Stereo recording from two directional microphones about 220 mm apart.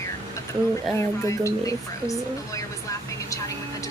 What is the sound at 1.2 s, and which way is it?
Speech, 15° left (ahead or behind).